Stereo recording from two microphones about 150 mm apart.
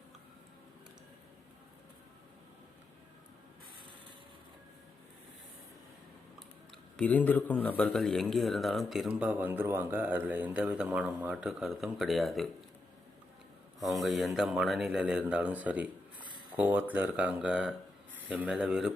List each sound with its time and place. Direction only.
6.9 s speech: 10° left (ahead or behind)
13.7 s speech: centre (ahead or behind)